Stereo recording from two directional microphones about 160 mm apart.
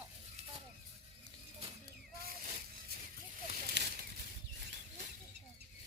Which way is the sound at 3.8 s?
90° right.